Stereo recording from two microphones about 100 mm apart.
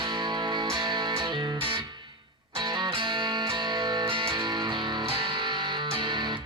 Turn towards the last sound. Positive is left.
turn(degrees=-50)  # may be behind; listen again after turning